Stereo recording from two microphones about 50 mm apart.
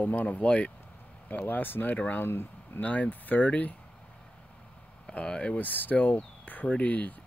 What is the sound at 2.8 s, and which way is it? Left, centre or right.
Speech, left.